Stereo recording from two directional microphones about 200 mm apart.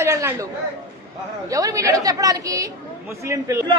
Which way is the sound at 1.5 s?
15° right (ahead or behind).